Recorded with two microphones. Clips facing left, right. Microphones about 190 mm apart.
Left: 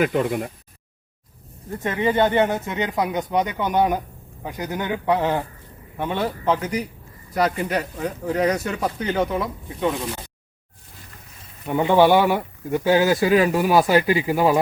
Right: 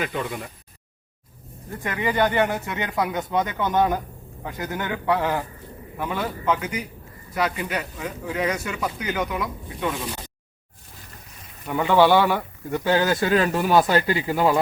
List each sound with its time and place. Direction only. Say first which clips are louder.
0.0 s speech: left 7 dB; 50° left (ahead or behind)
1.8 s speech: left 3 dB; 25° left (ahead or behind)
11.6 s speech: left 2 dB; 20° left (ahead or behind)